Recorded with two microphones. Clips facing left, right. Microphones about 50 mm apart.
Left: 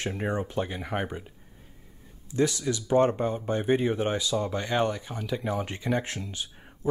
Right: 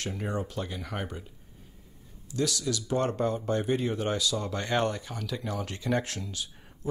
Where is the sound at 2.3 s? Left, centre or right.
Left.